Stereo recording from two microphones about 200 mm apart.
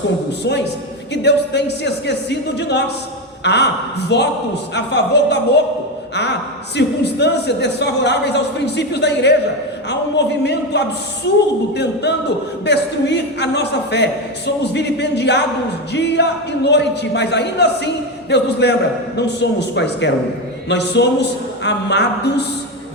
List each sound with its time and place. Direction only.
1.1 s a man's voice: 60° left (ahead or behind)
6.7 s a man's voice: 60° left (ahead or behind)